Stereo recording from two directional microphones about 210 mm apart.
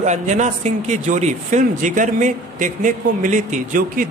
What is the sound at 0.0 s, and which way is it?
A man's voice, 35° right (ahead or behind).